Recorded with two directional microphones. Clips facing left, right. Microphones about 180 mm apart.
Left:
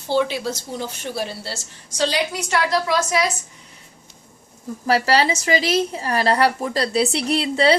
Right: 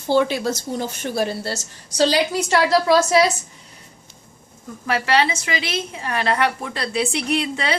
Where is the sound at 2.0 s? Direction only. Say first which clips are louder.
Right 4 dB; 35° right (ahead or behind).